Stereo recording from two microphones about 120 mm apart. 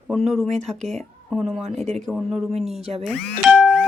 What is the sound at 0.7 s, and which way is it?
Speech, 70° right (ahead or behind).